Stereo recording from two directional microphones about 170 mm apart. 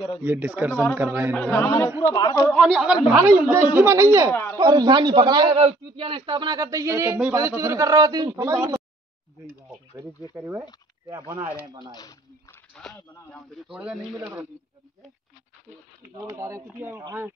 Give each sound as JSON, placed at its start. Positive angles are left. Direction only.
{"t": 0.2, "sound": "speech", "side_deg": -10}
{"t": 1.3, "sound": "a man's voice", "side_deg": 10}
{"t": 2.5, "sound": "a man's voice", "side_deg": 0}
{"t": 4.3, "sound": "a man's voice", "side_deg": 10}
{"t": 4.6, "sound": "a man's voice", "side_deg": -25}
{"t": 10.3, "sound": "a man's voice", "side_deg": -15}
{"t": 11.9, "sound": "speech", "side_deg": 20}
{"t": 12.7, "sound": "a man's voice", "side_deg": 5}
{"t": 16.2, "sound": "speech", "side_deg": -20}